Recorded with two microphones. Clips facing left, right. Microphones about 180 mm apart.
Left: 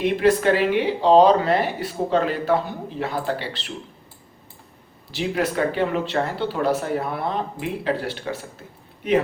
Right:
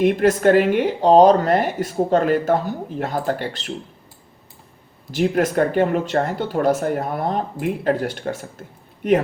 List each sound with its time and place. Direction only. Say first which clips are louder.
0.0 s speech: right 3 dB; 45° right (ahead or behind)
5.1 s speech: right 5 dB; 45° right (ahead or behind)